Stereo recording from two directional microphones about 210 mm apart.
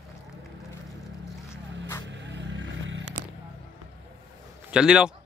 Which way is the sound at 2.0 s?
60° right (ahead or behind).